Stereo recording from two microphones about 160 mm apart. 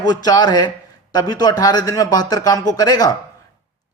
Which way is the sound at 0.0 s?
25° left (ahead or behind).